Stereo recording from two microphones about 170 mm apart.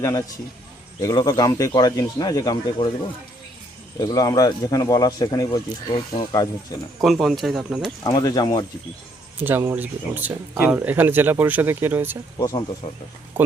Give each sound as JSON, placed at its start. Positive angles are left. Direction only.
{"t": 0.0, "sound": "a man's voice", "side_deg": 15}
{"t": 4.0, "sound": "speech", "side_deg": 20}
{"t": 7.0, "sound": "speech", "side_deg": 0}
{"t": 8.0, "sound": "speech", "side_deg": 25}
{"t": 9.4, "sound": "speech", "side_deg": -15}
{"t": 12.4, "sound": "speech", "side_deg": 20}